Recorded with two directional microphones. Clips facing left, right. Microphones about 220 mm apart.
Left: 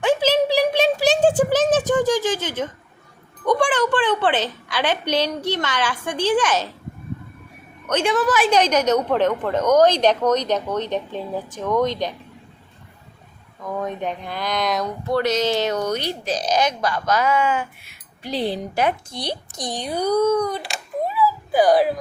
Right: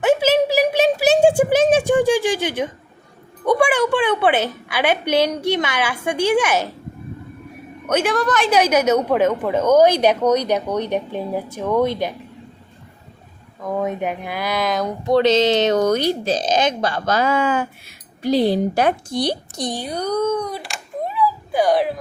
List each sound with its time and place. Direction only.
0.0 s a sound: 10° right (ahead or behind)
3.4 s a woman's voice: 10° right (ahead or behind)
7.9 s a woman's voice: 5° right (ahead or behind)
8.4 s a woman's voice: 10° right (ahead or behind)
13.7 s a woman's voice: 10° right (ahead or behind)
15.0 s speech: 20° right (ahead or behind)
15.8 s speech: 45° right (ahead or behind)
16.2 s speech: 25° right (ahead or behind)
19.9 s speech: 10° left (ahead or behind)
21.0 s a sound: 5° left (ahead or behind)